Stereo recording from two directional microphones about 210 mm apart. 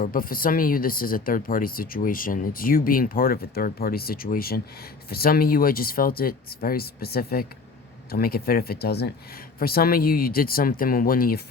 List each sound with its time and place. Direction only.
0.0 s speech: 40° left (ahead or behind)